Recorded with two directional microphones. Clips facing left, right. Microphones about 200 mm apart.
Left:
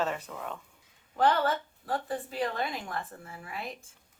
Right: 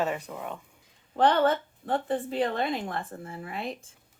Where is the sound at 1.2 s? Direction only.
35° right (ahead or behind).